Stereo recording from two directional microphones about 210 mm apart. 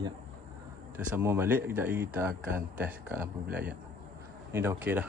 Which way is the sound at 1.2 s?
10° right (ahead or behind).